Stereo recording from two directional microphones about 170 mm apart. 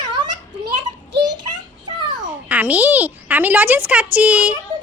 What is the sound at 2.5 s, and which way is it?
Speech, 10° right (ahead or behind).